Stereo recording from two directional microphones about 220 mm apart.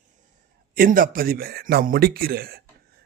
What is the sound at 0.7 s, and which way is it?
A man's voice, 40° right (ahead or behind).